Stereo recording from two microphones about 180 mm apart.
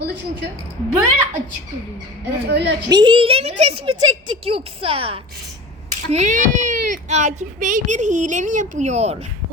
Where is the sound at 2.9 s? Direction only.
25° right (ahead or behind).